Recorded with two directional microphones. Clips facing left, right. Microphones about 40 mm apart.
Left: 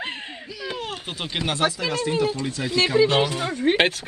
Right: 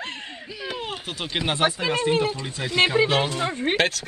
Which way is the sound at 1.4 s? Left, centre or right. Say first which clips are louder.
Even; right.